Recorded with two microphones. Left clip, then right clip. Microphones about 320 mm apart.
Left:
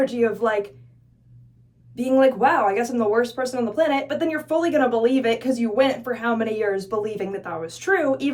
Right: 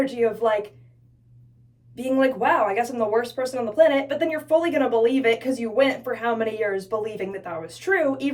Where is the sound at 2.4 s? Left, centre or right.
Left.